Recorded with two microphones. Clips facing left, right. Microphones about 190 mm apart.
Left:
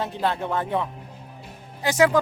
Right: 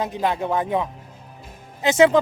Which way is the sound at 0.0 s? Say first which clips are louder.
Right 2 dB; 15° right (ahead or behind).